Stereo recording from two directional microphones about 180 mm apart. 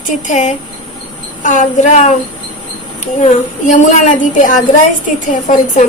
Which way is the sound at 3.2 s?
40° left (ahead or behind).